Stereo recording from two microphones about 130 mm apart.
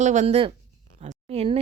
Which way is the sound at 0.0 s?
70° right (ahead or behind).